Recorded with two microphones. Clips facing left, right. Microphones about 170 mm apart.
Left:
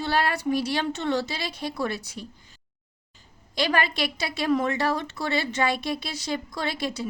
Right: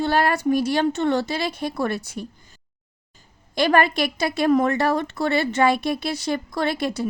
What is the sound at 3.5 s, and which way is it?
A woman's voice, 50° right (ahead or behind).